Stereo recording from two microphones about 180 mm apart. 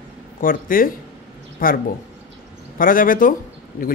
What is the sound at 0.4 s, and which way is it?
Speech, 50° left (ahead or behind).